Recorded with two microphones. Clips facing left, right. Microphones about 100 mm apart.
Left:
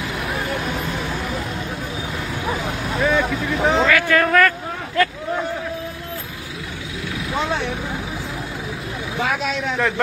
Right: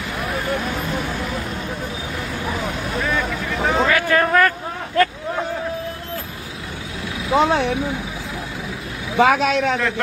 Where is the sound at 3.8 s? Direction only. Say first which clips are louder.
Even; 30° right (ahead or behind).